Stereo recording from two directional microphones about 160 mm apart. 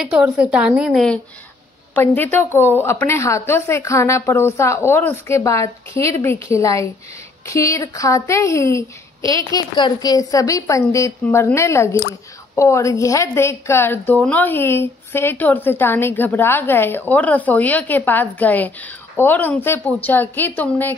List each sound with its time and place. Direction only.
0.0 s a woman's voice: 5° right (ahead or behind); by 20.9 s 15° left (ahead or behind)